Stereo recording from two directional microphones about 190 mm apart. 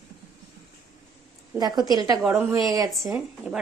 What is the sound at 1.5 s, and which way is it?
A woman's voice, 20° right (ahead or behind).